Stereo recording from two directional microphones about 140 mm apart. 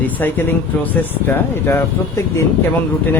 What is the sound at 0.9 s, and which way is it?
Speech, 15° left (ahead or behind).